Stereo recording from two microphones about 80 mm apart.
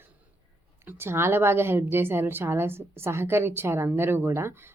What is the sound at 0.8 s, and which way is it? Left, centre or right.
Speech, right.